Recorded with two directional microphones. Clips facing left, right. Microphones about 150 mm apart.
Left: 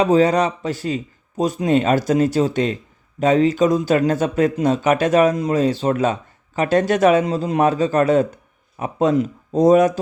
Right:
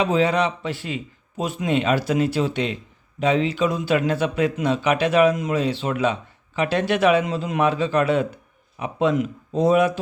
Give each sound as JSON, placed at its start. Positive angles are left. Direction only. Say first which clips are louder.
{"t": 0.0, "sound": "a man's voice", "louder": "left 4 dB", "side_deg": 40}